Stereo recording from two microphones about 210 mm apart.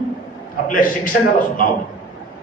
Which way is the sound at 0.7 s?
40° left (ahead or behind).